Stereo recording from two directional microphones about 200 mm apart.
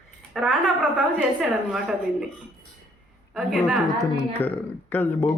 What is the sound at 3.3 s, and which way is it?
Speech, centre (ahead or behind).